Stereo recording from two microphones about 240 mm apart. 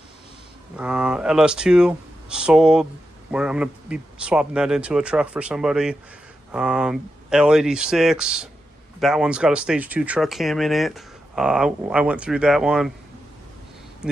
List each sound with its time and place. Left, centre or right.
0.7 s speech: centre